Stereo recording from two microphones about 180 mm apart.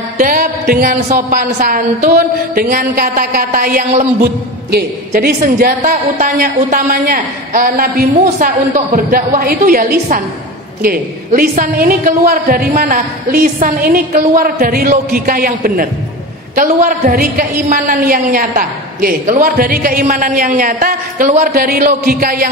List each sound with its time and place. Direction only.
0.2 s music: 55° right (ahead or behind)
1.0 s a woman's voice: 55° right (ahead or behind)